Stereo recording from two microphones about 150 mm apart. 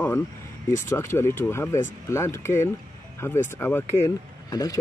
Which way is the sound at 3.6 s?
15° left (ahead or behind).